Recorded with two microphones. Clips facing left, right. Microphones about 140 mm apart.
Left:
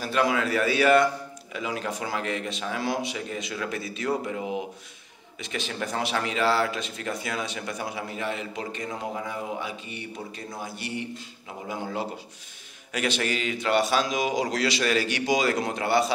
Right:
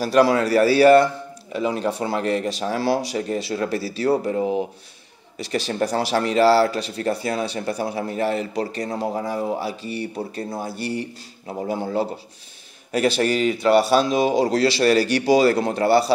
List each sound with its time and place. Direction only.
0.0 s speech: 35° right (ahead or behind)